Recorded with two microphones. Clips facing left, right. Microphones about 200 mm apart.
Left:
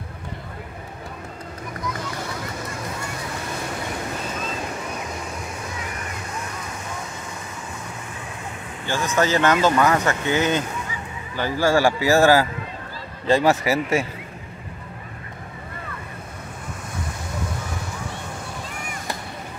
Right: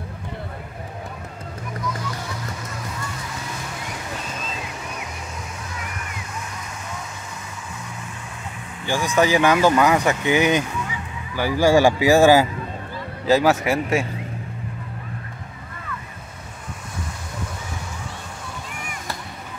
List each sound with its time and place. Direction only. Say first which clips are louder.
8.8 s speech: right 2 dB; 15° right (ahead or behind)
13.3 s speech: right 1 dB; centre (ahead or behind)